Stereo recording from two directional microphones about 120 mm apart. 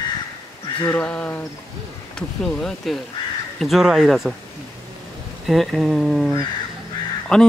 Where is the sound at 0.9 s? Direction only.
10° left (ahead or behind).